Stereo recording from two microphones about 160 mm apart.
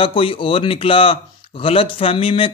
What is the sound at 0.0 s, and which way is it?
A man's voice, 35° left (ahead or behind).